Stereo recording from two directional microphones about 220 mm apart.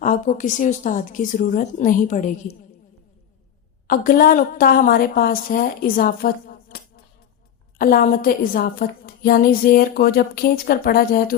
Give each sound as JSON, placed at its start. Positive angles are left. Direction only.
{"t": 0.0, "sound": "a woman's voice", "side_deg": 35}
{"t": 3.8, "sound": "a woman's voice", "side_deg": 40}